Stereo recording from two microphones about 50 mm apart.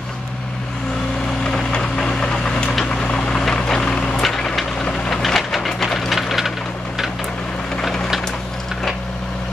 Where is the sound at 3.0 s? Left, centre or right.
Centre.